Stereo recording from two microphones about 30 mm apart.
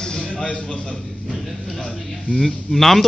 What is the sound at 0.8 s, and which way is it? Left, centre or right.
Speech, left.